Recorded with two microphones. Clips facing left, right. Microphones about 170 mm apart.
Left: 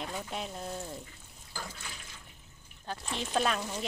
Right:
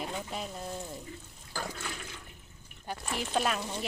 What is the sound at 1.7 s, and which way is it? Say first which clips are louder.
Water: right 7 dB; 65° right (ahead or behind).